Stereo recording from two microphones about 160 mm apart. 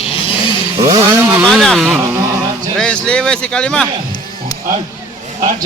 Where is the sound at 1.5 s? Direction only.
Centre (ahead or behind).